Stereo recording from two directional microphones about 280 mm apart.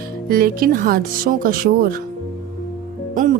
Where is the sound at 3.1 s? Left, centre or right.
Right.